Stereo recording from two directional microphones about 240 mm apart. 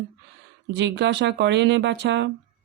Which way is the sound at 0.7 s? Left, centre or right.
Right.